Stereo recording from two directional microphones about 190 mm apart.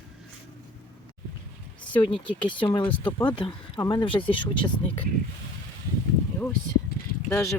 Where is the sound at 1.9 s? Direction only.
25° left (ahead or behind).